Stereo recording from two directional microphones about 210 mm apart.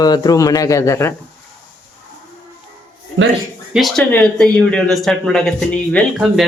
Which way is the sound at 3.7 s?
Centre (ahead or behind).